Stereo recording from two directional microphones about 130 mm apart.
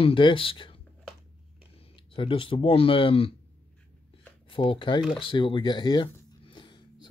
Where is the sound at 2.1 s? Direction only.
40° left (ahead or behind).